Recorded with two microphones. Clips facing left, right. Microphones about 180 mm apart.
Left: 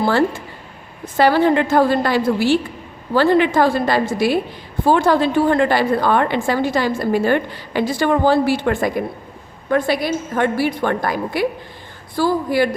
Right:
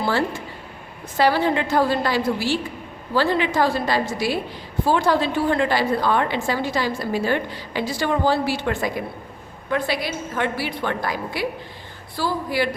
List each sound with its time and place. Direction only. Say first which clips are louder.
1.1 s a woman's voice: left 5 dB; 55° left (ahead or behind)